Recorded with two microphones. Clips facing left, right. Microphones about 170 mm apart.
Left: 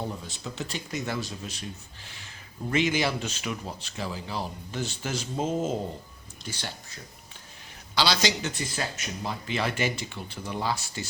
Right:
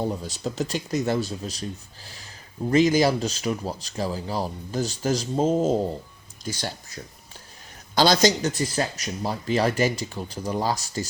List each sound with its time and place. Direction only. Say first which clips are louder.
0.1 s speech: right 7 dB; 35° right (ahead or behind)
7.9 s speech: right 7 dB; 45° right (ahead or behind)